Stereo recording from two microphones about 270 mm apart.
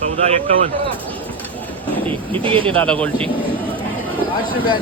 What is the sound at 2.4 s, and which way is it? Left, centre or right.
Speech, centre.